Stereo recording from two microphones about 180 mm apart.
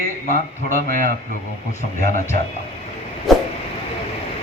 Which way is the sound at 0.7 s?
50° right (ahead or behind).